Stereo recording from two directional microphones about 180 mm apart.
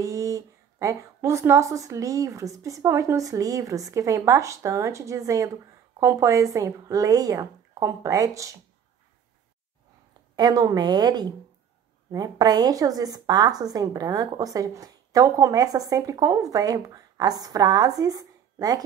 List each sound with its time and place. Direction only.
0.0 s a woman's voice: 20° right (ahead or behind)
10.3 s a woman's voice: 20° right (ahead or behind)